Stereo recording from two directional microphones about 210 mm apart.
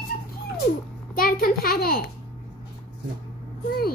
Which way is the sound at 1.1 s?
45° left (ahead or behind).